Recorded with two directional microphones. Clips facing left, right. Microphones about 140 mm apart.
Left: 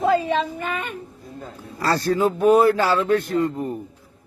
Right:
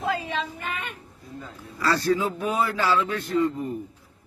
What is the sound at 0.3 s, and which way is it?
A man's voice, 40° left (ahead or behind).